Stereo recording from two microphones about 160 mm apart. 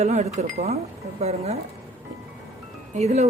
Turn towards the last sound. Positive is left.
turn(degrees=-45)  # may be behind; listen again after turning